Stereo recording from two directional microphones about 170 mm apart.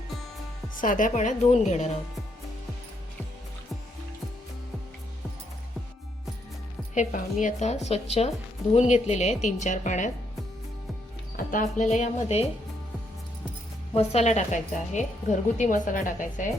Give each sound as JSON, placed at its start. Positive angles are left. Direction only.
{"t": 0.8, "sound": "a woman's voice", "side_deg": 50}
{"t": 6.9, "sound": "a woman's voice", "side_deg": 45}
{"t": 11.3, "sound": "a woman's voice", "side_deg": 50}
{"t": 13.9, "sound": "a woman's voice", "side_deg": 40}